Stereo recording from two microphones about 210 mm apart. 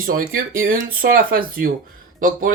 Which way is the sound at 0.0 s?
40° right (ahead or behind).